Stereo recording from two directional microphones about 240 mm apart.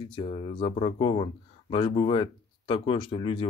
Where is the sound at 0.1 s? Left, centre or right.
Left.